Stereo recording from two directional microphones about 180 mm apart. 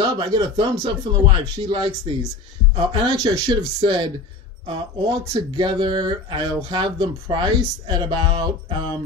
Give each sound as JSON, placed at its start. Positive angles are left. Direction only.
{"t": 0.0, "sound": "speech", "side_deg": -20}
{"t": 5.3, "sound": "speech", "side_deg": -25}